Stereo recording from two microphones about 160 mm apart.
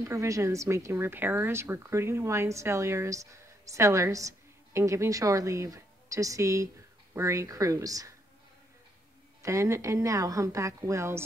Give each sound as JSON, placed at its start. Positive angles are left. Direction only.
{"t": 0.1, "sound": "speech", "side_deg": -20}
{"t": 9.4, "sound": "speech", "side_deg": -20}